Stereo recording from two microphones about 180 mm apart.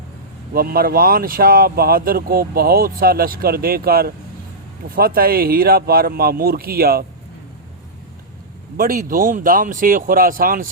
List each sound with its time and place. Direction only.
0.5 s speech: 55° right (ahead or behind)
8.8 s speech: 50° right (ahead or behind)